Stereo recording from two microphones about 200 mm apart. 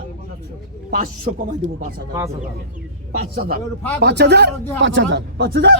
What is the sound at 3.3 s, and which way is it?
A man's voice, 50° right (ahead or behind).